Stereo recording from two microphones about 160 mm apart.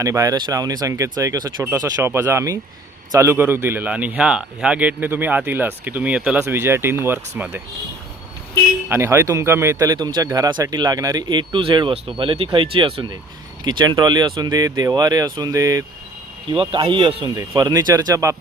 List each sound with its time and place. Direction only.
0.0 s a man's voice: 20° right (ahead or behind)
8.9 s speech: 15° right (ahead or behind)